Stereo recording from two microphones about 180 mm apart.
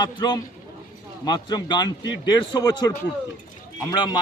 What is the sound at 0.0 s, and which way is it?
Speech, 25° left (ahead or behind).